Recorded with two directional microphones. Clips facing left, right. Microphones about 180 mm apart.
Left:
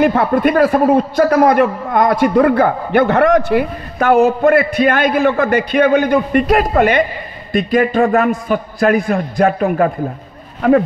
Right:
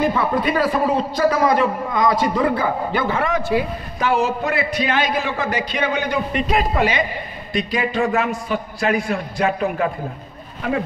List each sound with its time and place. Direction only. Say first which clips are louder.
0.0 s a man's voice: left 6 dB; 55° left (ahead or behind)